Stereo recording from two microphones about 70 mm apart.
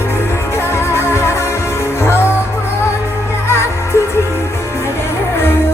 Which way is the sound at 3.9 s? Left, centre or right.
Left.